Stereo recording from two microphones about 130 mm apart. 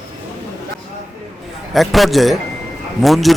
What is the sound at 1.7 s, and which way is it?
A man's voice, centre (ahead or behind).